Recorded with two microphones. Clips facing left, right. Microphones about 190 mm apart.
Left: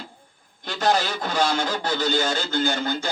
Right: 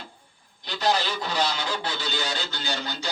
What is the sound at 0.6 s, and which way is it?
Speech, 50° left (ahead or behind).